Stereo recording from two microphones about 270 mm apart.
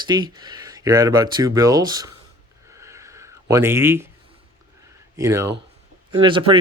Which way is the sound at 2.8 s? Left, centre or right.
Centre.